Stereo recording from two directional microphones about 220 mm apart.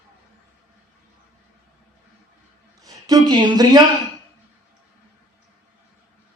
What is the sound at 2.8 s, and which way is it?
Speech, 15° right (ahead or behind).